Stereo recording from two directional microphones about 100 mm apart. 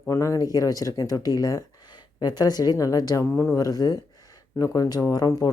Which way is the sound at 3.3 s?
25° left (ahead or behind).